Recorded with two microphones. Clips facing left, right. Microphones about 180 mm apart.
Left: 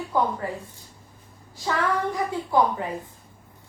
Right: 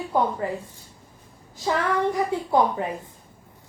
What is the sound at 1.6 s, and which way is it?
A woman's voice, 20° right (ahead or behind).